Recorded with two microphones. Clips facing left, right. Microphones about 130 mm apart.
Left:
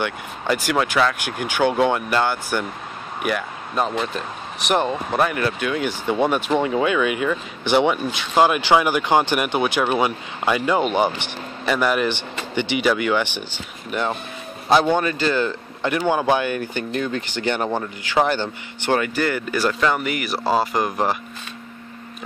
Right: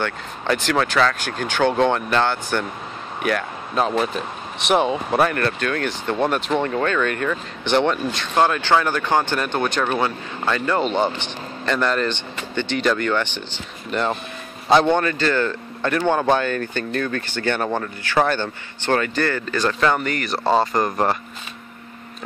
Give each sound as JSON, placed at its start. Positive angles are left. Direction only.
{"t": 0.0, "sound": "a man's voice", "side_deg": 10}
{"t": 15.0, "sound": "speech", "side_deg": 15}